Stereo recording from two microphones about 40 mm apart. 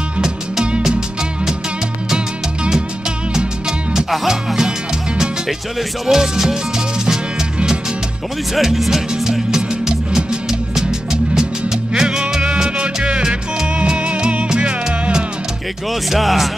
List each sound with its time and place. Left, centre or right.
3.9 s music: centre
4.6 s music: centre
8.5 s speech: centre
9.1 s music: centre
15.9 s speech: centre